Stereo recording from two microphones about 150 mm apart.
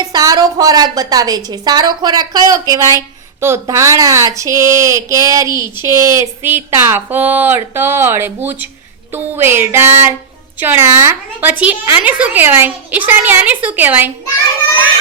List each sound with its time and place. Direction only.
0.0 s a woman's voice: 25° right (ahead or behind)
5.5 s speech: 30° left (ahead or behind)
5.8 s speech: 20° right (ahead or behind)